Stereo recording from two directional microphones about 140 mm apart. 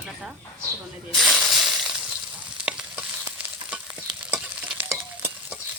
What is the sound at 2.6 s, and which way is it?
Stir, 5° right (ahead or behind).